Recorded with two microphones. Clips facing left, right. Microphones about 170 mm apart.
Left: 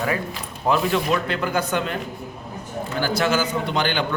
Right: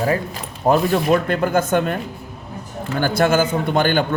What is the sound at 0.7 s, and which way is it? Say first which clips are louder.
A man's voice: right 5 dB; 45° right (ahead or behind).